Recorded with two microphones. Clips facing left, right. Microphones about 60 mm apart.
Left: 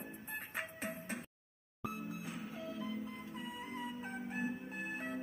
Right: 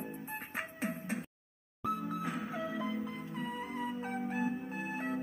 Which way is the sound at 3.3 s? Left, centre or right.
Right.